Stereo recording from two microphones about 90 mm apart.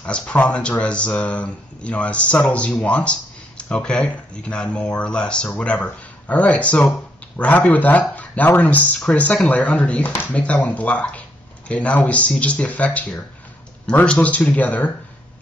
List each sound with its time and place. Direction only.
0.0 s speech: 15° left (ahead or behind)